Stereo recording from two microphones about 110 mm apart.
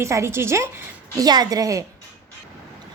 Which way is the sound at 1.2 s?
35° right (ahead or behind).